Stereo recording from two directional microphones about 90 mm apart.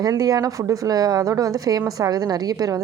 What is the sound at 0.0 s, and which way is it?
A woman's voice, 45° right (ahead or behind).